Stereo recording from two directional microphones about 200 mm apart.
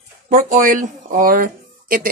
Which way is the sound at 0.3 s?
40° right (ahead or behind).